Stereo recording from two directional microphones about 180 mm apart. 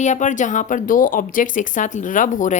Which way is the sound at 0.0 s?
40° left (ahead or behind).